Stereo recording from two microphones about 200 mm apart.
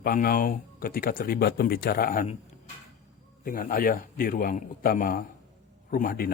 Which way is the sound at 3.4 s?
45° left (ahead or behind).